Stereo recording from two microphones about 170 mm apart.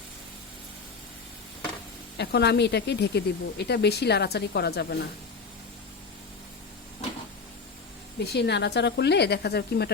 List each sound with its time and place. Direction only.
2.1 s speech: 75° left (ahead or behind)
8.2 s speech: 75° left (ahead or behind)